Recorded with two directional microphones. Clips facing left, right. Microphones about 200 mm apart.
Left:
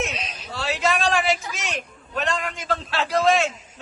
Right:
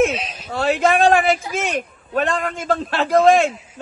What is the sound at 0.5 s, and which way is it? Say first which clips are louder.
A man's voice: right 7 dB; 55° right (ahead or behind).